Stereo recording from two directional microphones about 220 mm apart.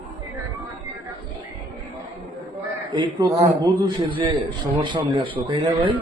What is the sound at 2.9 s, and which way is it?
A man's voice, 20° right (ahead or behind).